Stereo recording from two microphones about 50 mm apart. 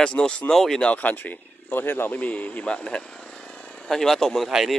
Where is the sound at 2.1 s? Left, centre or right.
Left.